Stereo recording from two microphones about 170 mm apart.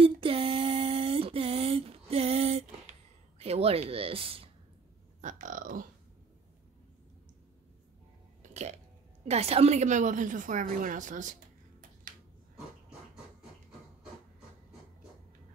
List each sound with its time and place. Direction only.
0.0 s a sound: 30° right (ahead or behind)
5.2 s speech: 50° right (ahead or behind)
8.4 s a woman's voice: 40° right (ahead or behind)